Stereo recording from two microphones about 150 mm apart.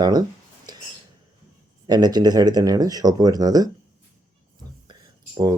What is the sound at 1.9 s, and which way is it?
Speech, 25° right (ahead or behind).